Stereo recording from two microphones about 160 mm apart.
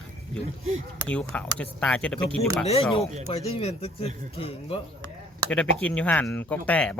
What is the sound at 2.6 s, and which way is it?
Speech, 40° left (ahead or behind).